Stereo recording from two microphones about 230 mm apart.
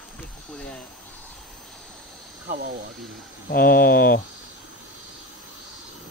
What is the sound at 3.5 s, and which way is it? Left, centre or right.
Speech, left.